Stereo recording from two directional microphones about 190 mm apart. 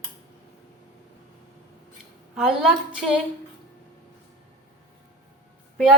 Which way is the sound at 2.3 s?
Centre (ahead or behind).